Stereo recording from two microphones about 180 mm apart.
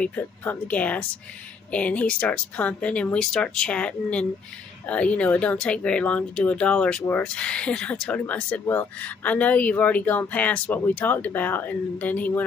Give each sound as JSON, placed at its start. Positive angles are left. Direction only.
{"t": 0.0, "sound": "speech", "side_deg": 10}